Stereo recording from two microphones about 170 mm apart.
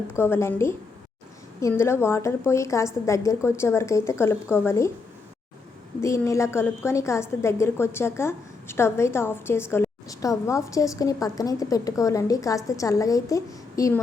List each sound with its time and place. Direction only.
0.2 s a woman's voice: 15° left (ahead or behind)
6.0 s a woman's voice: 15° left (ahead or behind)